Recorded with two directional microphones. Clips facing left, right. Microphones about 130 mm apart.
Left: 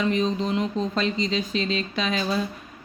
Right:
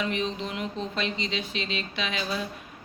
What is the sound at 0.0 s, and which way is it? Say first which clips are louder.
Speech: left 6 dB; 35° left (ahead or behind).